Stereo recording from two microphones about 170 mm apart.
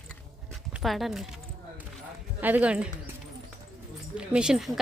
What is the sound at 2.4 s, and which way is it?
Speech, 10° right (ahead or behind).